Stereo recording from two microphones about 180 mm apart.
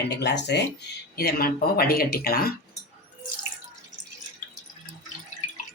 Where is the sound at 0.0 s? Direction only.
70° left (ahead or behind).